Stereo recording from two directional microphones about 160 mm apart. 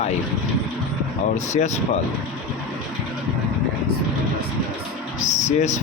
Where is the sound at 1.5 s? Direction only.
50° left (ahead or behind).